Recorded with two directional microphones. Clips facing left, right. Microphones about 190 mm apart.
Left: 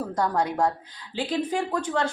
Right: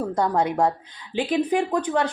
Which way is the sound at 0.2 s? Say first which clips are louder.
Right 2 dB; 25° right (ahead or behind).